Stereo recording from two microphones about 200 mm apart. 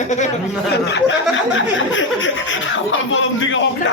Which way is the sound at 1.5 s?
70° left (ahead or behind).